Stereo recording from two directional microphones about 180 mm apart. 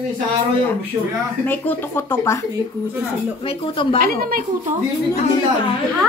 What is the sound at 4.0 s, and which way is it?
Speech, 55° right (ahead or behind).